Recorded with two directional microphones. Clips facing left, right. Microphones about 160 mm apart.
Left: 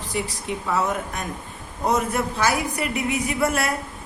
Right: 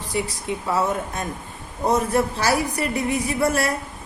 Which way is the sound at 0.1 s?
25° right (ahead or behind).